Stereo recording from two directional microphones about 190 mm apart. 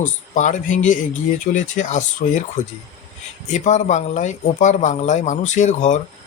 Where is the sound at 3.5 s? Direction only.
40° left (ahead or behind).